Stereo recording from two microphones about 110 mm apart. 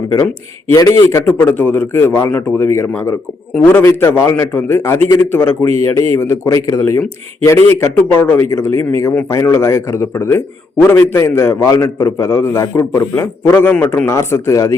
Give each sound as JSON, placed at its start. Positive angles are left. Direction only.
{"t": 0.7, "sound": "a man's voice", "side_deg": 30}
{"t": 1.2, "sound": "a man's voice", "side_deg": 15}